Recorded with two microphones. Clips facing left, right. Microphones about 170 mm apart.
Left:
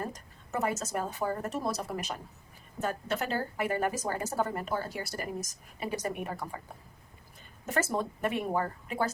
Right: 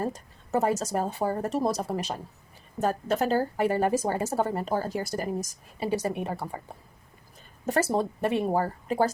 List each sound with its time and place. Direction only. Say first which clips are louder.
0.0 s speech: right 7 dB; 30° right (ahead or behind)
7.6 s speech: right 5 dB; 35° right (ahead or behind)